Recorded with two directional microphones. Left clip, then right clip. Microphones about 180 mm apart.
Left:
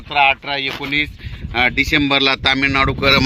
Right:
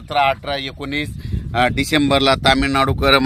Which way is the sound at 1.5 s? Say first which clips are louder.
Left 2 dB; 75° right (ahead or behind).